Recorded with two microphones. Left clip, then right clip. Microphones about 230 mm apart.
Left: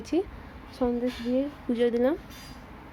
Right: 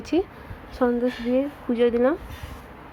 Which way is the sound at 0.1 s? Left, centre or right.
Centre.